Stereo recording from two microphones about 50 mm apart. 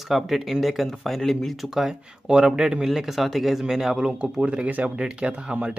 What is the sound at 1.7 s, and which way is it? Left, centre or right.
Speech, centre.